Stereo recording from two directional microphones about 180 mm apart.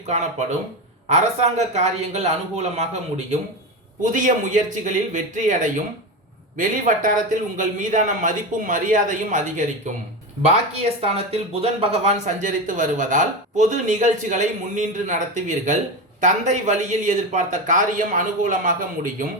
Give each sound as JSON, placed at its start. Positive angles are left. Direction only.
{"t": 1.0, "sound": "speech", "side_deg": -40}
{"t": 4.0, "sound": "speech", "side_deg": -45}
{"t": 10.7, "sound": "speech", "side_deg": -35}